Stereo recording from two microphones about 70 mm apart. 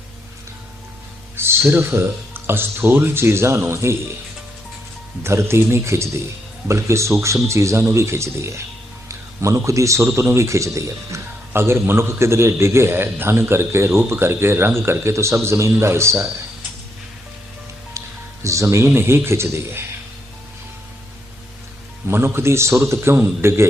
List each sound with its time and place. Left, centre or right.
1.4 s a man's voice: right
5.2 s a man's voice: right
9.0 s a sound: right
9.6 s a man's voice: right
18.4 s a man's voice: right
22.0 s a man's voice: right